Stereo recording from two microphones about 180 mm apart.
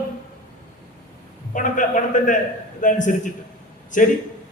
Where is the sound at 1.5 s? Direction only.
45° left (ahead or behind).